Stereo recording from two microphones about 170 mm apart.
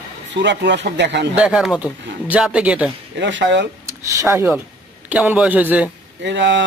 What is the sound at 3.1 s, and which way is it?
Speech, 90° right.